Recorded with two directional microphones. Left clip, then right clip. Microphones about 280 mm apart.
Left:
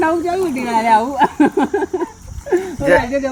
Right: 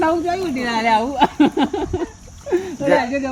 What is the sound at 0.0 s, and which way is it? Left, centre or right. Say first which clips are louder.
Speech: left 2 dB; centre.